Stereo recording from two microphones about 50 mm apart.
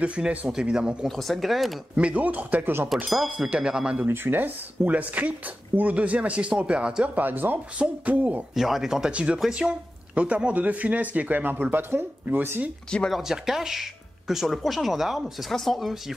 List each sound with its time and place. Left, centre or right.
0.0 s speech: right
0.5 s speech: centre
1.0 s speech: centre
2.0 s speech: right
2.9 s speech: centre
3.3 s speech: right
4.1 s speech: right; by 7.1 s centre
7.2 s speech: right
8.5 s speech: centre
9.5 s speech: centre; by 12.4 s right
13.1 s speech: centre
15.5 s speech: centre